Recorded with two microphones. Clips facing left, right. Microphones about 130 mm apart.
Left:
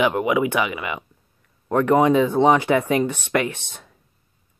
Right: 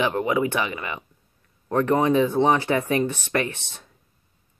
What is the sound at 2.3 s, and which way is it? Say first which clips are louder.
Speech: left 3 dB; 15° left (ahead or behind).